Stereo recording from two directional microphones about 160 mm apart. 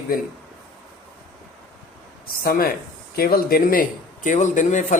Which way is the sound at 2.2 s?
70° left (ahead or behind).